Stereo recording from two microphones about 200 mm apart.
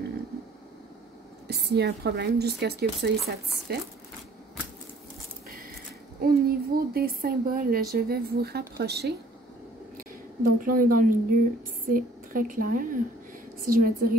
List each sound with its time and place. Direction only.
1.5 s speech: 55° right (ahead or behind)
6.2 s speech: 50° right (ahead or behind)